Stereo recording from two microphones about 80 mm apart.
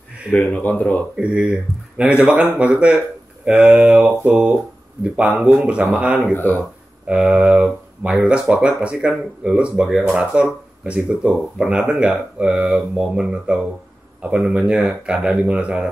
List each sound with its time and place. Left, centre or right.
0.3 s speech: centre
1.2 s speech: centre
6.3 s speech: left
7.1 s speech: centre